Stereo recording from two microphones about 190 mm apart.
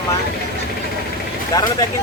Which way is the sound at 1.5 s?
20° left (ahead or behind).